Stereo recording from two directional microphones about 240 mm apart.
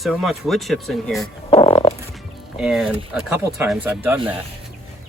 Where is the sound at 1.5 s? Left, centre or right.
Left.